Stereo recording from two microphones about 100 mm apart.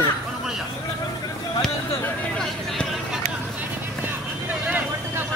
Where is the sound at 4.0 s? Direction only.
15° right (ahead or behind).